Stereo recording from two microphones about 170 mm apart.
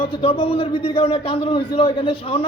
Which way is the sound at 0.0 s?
30° left (ahead or behind).